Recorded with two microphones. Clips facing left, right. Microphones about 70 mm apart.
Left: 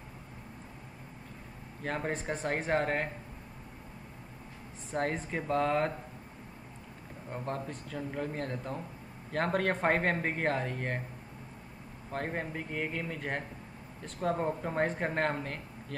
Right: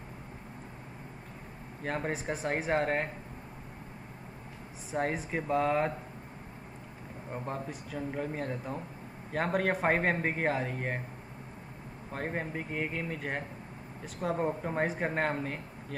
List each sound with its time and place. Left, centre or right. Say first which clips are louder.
1.8 s speech: right 1 dB; centre
4.9 s speech: right 1 dB; centre
7.2 s speech: even; centre
12.1 s speech: even; centre